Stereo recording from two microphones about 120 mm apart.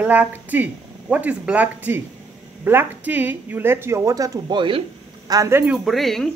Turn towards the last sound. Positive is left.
turn(degrees=0)  # may be behind; listen again after turning